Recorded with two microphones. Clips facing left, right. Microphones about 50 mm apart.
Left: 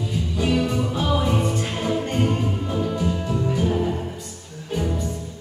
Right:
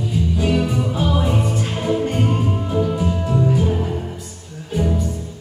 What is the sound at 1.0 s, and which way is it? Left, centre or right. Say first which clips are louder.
Music: right 1 dB; centre.